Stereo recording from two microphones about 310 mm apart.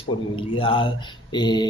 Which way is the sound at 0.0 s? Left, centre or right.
Centre.